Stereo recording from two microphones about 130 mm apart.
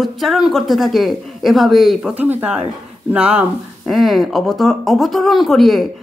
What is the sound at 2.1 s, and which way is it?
Speech, 15° right (ahead or behind).